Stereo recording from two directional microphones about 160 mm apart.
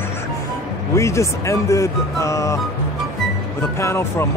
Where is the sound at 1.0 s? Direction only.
20° left (ahead or behind).